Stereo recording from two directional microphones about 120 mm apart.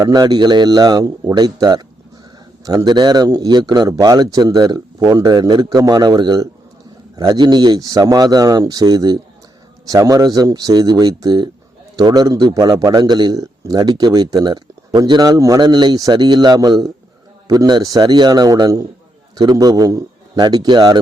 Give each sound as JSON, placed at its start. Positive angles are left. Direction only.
{"t": 0.0, "sound": "a man's voice", "side_deg": -35}